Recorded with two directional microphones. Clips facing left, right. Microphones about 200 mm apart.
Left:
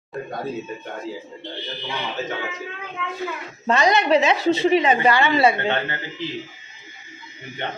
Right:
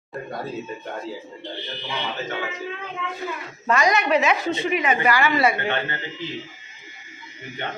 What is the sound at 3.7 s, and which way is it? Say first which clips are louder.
A woman's voice: left 2 dB; 30° left (ahead or behind).